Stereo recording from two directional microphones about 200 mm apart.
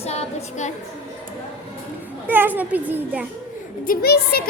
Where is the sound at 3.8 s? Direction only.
50° left (ahead or behind).